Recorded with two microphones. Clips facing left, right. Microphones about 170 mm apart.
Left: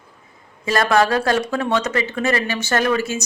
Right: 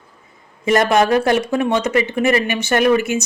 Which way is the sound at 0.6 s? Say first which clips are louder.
Right 3 dB; 20° right (ahead or behind).